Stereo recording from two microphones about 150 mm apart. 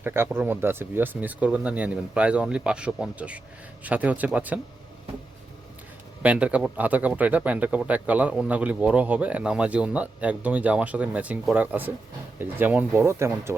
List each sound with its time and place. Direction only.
0.0 s speech: 15° right (ahead or behind)
6.2 s speech: 10° right (ahead or behind)